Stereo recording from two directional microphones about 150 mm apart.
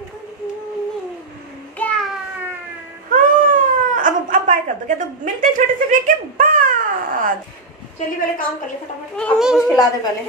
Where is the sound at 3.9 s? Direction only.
60° right (ahead or behind).